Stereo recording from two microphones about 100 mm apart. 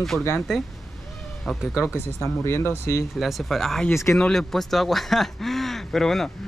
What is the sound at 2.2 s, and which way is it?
Speech, 25° left (ahead or behind).